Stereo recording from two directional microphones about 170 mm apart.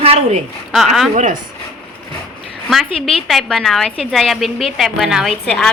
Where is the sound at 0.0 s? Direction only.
35° right (ahead or behind).